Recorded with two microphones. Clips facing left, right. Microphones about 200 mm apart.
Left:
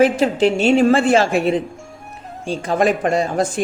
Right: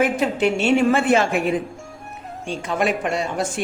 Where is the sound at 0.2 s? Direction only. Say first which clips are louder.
Left 4 dB; 35° left (ahead or behind).